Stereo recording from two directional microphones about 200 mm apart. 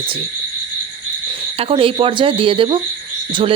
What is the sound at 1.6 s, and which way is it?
Speech, 25° right (ahead or behind).